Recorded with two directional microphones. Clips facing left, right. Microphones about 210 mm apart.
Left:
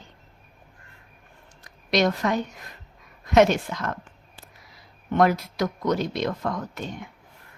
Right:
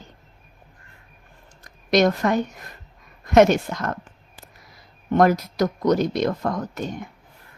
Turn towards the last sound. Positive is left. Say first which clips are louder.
# right 4 dB
turn(degrees=-45)  # may be behind; listen again after turning